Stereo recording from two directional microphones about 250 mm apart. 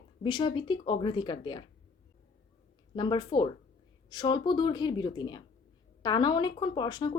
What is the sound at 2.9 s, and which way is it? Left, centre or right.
Speech, centre.